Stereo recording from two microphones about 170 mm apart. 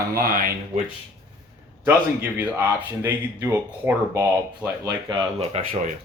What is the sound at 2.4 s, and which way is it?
Speech, 15° right (ahead or behind).